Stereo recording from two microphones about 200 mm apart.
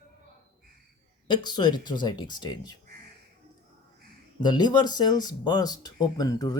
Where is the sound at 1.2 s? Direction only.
20° left (ahead or behind).